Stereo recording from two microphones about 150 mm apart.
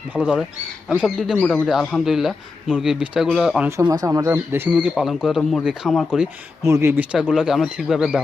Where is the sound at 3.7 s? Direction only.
20° right (ahead or behind); by 6.3 s 5° right (ahead or behind).